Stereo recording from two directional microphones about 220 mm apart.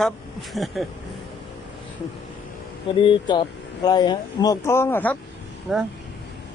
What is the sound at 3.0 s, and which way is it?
Speech, 20° left (ahead or behind).